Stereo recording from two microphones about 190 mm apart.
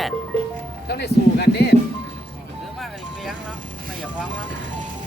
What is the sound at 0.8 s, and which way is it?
Speech, 60° left (ahead or behind).